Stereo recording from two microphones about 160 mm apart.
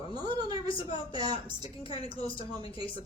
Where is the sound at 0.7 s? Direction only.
30° left (ahead or behind).